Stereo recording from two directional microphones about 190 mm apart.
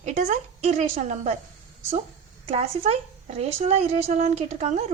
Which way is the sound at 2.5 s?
30° right (ahead or behind).